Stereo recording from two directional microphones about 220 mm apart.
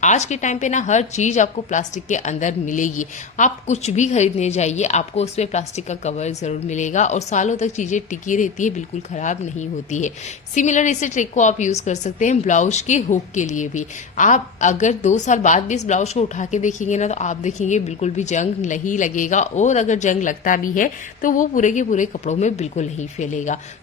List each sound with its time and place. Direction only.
0.0 s a woman's voice: 30° left (ahead or behind)